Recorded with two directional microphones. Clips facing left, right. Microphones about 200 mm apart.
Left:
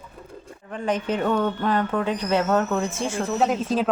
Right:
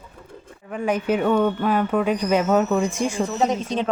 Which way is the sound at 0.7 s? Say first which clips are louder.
Right 3 dB; 10° right (ahead or behind).